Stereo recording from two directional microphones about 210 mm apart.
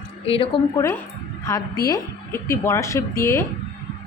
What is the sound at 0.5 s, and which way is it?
A woman's voice, 25° left (ahead or behind).